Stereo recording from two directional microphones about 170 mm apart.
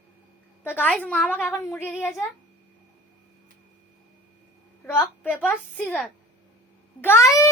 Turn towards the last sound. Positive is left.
turn(degrees=15)  # may be behind; listen again after turning